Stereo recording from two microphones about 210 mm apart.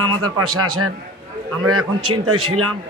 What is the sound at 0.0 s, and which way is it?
A man's voice, 90° right.